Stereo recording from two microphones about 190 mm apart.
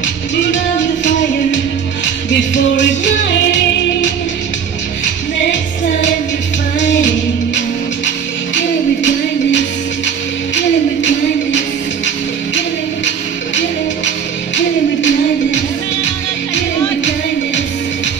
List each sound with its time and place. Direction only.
2.5 s music: 70° left (ahead or behind)
5.0 s music: 70° left (ahead or behind)
10.0 s music: 70° left (ahead or behind)
13.6 s music: 70° left (ahead or behind)